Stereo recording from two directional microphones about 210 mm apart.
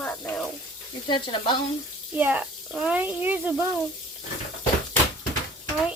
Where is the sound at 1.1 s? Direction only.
20° left (ahead or behind).